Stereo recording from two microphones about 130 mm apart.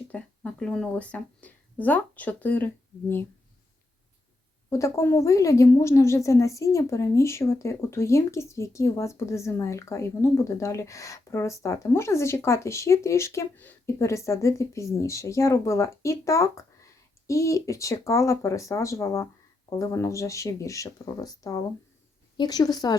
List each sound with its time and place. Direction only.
0.1 s speech: 10° left (ahead or behind)
4.7 s a woman's voice: 25° left (ahead or behind)